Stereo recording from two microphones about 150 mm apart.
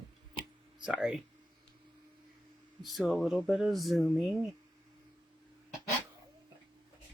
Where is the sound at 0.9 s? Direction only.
5° right (ahead or behind).